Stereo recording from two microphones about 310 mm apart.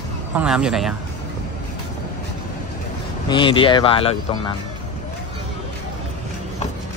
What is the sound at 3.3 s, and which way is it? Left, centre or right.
Speech, centre.